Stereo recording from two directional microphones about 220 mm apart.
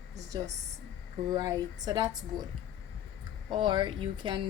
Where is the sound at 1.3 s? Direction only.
15° right (ahead or behind).